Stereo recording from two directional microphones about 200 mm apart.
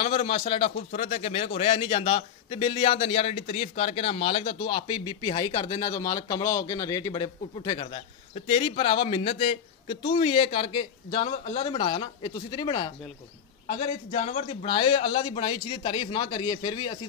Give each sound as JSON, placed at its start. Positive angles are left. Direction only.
{"t": 0.0, "sound": "a man's voice", "side_deg": 25}
{"t": 0.9, "sound": "a man's voice", "side_deg": 40}
{"t": 13.7, "sound": "a man's voice", "side_deg": 30}